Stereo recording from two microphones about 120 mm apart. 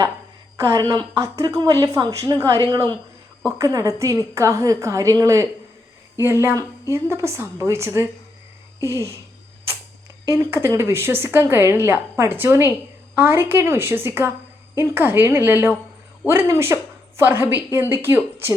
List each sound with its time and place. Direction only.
0.7 s a woman's voice: 30° right (ahead or behind)
10.5 s a woman's voice: 20° right (ahead or behind)